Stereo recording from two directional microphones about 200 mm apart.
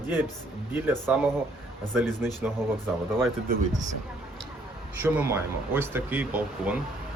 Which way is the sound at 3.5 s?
40° right (ahead or behind).